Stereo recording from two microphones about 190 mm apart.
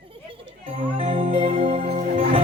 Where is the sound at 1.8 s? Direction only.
50° right (ahead or behind).